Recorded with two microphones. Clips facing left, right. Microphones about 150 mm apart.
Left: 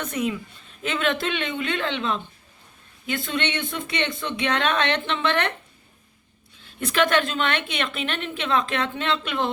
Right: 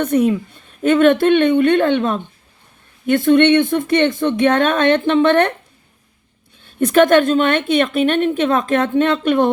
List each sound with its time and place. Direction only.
0.1 s a woman's voice: 45° right (ahead or behind)
6.7 s a woman's voice: 45° right (ahead or behind)